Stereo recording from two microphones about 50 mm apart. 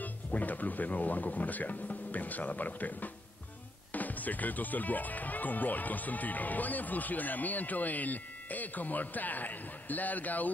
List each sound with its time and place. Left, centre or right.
0.0 s speech: left